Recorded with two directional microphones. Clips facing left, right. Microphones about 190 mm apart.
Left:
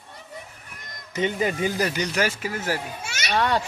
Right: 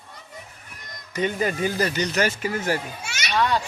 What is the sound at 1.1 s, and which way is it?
Speech, 20° left (ahead or behind).